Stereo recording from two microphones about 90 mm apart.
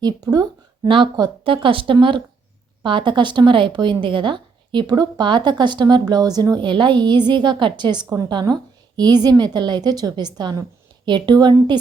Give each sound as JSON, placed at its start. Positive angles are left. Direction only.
{"t": 0.0, "sound": "a woman's voice", "side_deg": -45}
{"t": 0.9, "sound": "a woman's voice", "side_deg": -65}
{"t": 1.5, "sound": "a woman's voice", "side_deg": -75}